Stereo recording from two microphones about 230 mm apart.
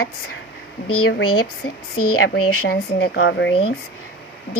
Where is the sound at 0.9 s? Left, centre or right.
Left.